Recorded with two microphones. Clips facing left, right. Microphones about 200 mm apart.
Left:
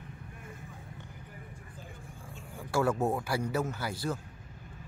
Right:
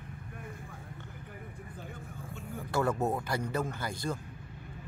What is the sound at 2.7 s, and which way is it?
Speech, 10° left (ahead or behind).